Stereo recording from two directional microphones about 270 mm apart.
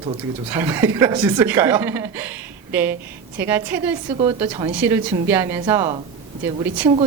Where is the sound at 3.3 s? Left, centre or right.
Centre.